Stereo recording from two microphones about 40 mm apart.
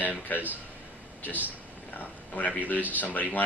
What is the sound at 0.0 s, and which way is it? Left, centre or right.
Speech, left.